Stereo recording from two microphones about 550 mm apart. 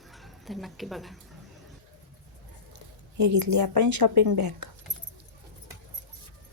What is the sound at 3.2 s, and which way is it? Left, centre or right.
A woman's voice, right.